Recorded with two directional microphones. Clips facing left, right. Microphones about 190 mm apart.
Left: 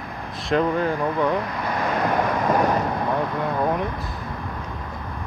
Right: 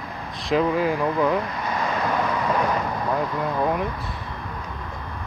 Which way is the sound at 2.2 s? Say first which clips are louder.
Left 4 dB; 50° left (ahead or behind).